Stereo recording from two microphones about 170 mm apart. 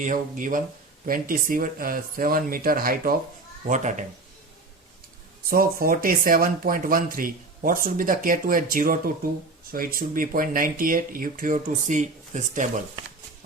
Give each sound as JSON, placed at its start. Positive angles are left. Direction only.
{"t": 0.0, "sound": "speech", "side_deg": -50}
{"t": 3.7, "sound": "speech", "side_deg": -45}
{"t": 5.5, "sound": "speech", "side_deg": -60}